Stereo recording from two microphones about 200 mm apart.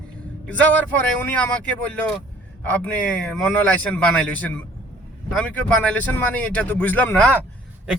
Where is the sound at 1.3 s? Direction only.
5° left (ahead or behind).